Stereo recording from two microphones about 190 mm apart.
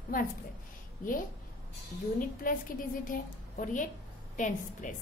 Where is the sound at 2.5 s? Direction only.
45° left (ahead or behind).